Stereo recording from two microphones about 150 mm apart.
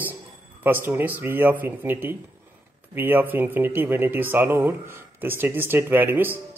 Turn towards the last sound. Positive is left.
turn(degrees=-15)  # may be behind; listen again after turning